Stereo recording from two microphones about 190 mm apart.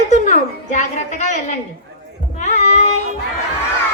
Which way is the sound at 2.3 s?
40° left (ahead or behind).